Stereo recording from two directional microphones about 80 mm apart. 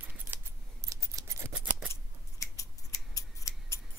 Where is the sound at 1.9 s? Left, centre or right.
Left.